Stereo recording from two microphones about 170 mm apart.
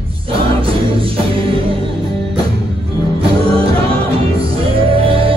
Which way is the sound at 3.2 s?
35° right (ahead or behind).